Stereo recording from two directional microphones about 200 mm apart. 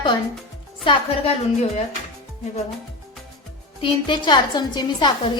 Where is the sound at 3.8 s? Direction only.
25° left (ahead or behind).